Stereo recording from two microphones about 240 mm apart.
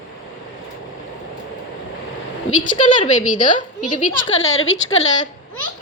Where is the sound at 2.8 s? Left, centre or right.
Left.